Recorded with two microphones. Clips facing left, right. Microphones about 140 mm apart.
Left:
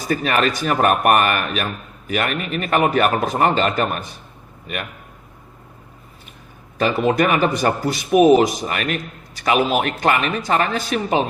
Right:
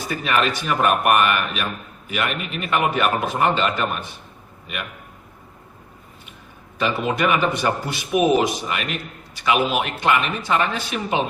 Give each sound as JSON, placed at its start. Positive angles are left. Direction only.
{"t": 0.1, "sound": "speech", "side_deg": 40}
{"t": 6.7, "sound": "speech", "side_deg": 40}